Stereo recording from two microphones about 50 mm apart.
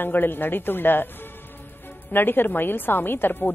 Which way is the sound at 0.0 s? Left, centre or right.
Left.